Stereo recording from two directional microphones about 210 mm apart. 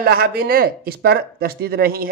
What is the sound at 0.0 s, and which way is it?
Speech, 45° right (ahead or behind).